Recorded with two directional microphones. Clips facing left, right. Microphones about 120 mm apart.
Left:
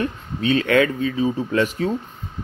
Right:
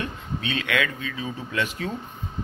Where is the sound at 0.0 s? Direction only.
40° left (ahead or behind).